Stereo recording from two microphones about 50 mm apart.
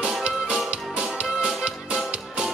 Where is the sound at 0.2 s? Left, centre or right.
Right.